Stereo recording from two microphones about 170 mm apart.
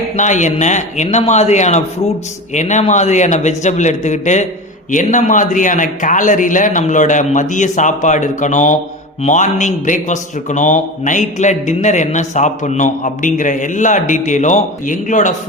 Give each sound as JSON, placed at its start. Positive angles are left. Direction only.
{"t": 0.2, "sound": "a man's voice", "side_deg": 45}